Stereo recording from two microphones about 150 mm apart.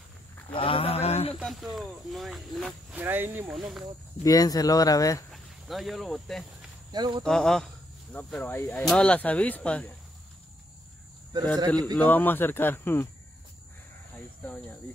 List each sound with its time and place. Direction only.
0.5 s a sound: 35° left (ahead or behind)
1.4 s speech: centre (ahead or behind)
3.0 s speech: 15° right (ahead or behind)
3.5 s speech: centre (ahead or behind)
4.2 s speech: 25° left (ahead or behind)
5.3 s speech: centre (ahead or behind)
6.9 s speech: 30° right (ahead or behind)
7.2 s speech: 5° left (ahead or behind)
11.5 s speech: 25° right (ahead or behind)
12.0 s speech: 10° left (ahead or behind)
14.1 s speech: 10° left (ahead or behind)